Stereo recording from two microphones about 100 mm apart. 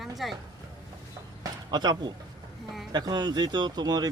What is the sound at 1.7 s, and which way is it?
Speech, 45° right (ahead or behind).